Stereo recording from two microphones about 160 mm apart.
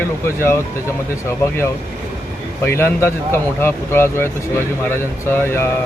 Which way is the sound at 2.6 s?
15° left (ahead or behind).